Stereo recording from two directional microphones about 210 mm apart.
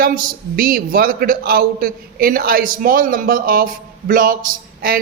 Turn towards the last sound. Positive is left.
turn(degrees=-45)  # may be behind; listen again after turning